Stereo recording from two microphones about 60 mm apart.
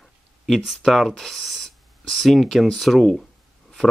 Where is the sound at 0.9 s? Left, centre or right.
Centre.